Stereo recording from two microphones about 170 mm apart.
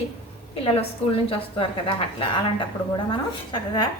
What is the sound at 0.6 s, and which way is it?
A woman's voice, 35° left (ahead or behind).